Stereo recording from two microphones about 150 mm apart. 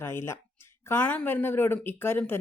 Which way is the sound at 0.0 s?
15° left (ahead or behind).